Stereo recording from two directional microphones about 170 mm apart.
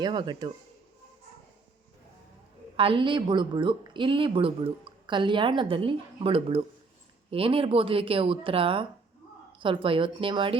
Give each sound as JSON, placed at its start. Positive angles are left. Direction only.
{"t": 0.0, "sound": "speech", "side_deg": -25}
{"t": 2.7, "sound": "speech", "side_deg": -30}